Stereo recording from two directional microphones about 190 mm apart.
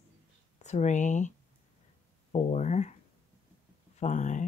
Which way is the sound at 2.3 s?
35° left (ahead or behind).